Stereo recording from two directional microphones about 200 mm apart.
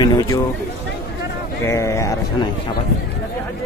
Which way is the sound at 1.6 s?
15° left (ahead or behind).